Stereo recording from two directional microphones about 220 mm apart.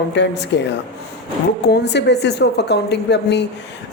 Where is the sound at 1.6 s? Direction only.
50° left (ahead or behind).